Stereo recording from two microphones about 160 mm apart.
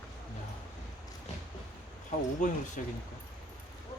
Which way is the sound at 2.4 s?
50° left (ahead or behind).